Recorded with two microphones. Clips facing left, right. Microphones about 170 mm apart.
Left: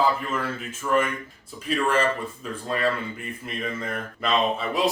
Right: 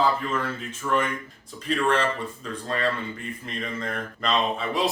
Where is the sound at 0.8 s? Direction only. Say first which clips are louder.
Left 2 dB; 15° left (ahead or behind).